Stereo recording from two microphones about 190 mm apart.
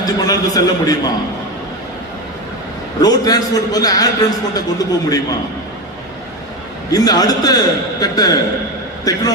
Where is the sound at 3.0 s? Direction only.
20° left (ahead or behind).